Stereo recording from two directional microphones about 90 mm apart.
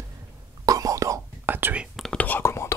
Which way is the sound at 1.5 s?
20° right (ahead or behind).